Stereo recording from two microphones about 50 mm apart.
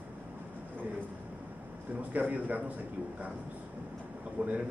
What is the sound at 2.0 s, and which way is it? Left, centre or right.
Speech, right.